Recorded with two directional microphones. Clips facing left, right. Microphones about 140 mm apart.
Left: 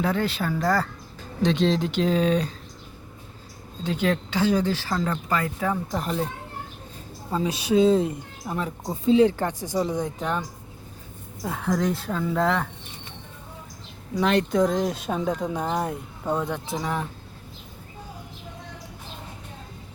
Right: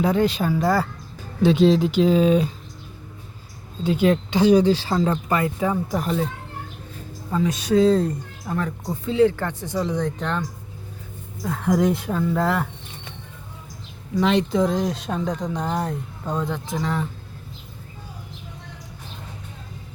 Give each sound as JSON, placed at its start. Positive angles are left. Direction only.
{"t": 0.0, "sound": "speech", "side_deg": -15}
{"t": 3.8, "sound": "speech", "side_deg": -15}
{"t": 7.3, "sound": "speech", "side_deg": 25}
{"t": 7.7, "sound": "speech", "side_deg": 0}
{"t": 11.6, "sound": "speech", "side_deg": -10}
{"t": 12.2, "sound": "speech", "side_deg": 0}
{"t": 14.2, "sound": "speech", "side_deg": 0}